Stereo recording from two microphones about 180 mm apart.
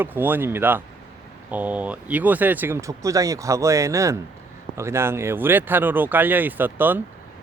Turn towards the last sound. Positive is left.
turn(degrees=-10)  # may be behind; listen again after turning